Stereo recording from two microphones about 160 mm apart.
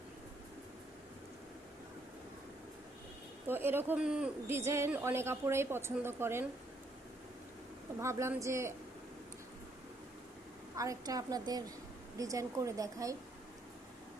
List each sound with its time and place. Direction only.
3.4 s a woman's voice: 15° right (ahead or behind)
4.4 s a woman's voice: 15° right (ahead or behind)
8.0 s a woman's voice: 15° right (ahead or behind)
10.8 s speech: 20° right (ahead or behind)